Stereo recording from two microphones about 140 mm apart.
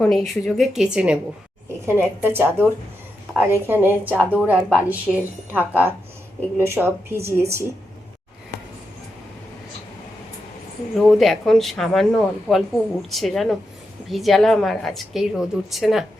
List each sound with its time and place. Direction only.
0.0 s speech: centre (ahead or behind)
6.6 s speech: 15° right (ahead or behind)
11.1 s speech: centre (ahead or behind)